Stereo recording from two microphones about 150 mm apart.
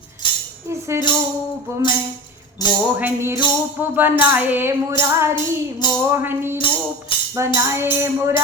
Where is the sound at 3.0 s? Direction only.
15° right (ahead or behind).